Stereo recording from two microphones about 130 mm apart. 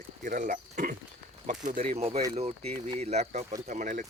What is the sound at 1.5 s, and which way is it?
Speech, 75° right (ahead or behind).